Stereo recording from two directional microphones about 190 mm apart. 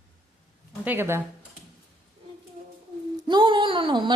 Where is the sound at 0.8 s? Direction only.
10° right (ahead or behind).